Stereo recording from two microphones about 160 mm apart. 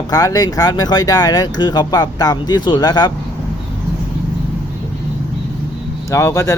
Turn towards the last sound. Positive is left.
turn(degrees=20)  # may be behind; listen again after turning